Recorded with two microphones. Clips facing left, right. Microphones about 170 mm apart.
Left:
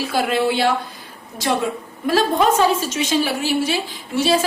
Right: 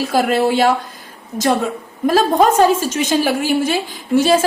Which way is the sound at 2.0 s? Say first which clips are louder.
Right 4 dB; 45° right (ahead or behind).